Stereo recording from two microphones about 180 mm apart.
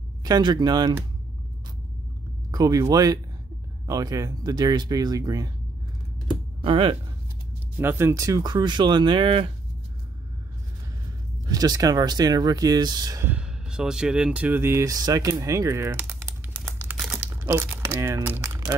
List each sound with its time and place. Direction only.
0.2 s speech: 20° right (ahead or behind)
2.5 s speech: 20° right (ahead or behind)
6.6 s speech: 30° right (ahead or behind)
7.7 s speech: 15° right (ahead or behind)
11.4 s speech: 20° right (ahead or behind)
13.3 s speech: 5° right (ahead or behind)
17.0 s crumpling: 5° right (ahead or behind)